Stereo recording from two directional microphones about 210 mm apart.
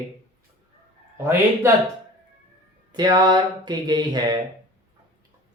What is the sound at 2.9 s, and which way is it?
Speech, 20° right (ahead or behind).